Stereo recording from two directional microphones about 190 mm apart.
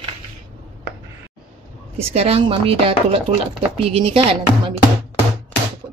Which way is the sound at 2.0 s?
30° right (ahead or behind).